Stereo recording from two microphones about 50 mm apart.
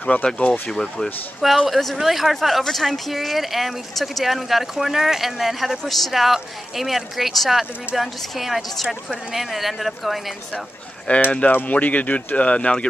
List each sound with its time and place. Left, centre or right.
0.1 s speech: left
0.5 s speech: centre
11.1 s speech: left